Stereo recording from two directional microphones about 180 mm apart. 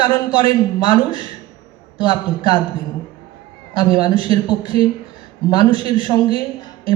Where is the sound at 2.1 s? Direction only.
25° left (ahead or behind).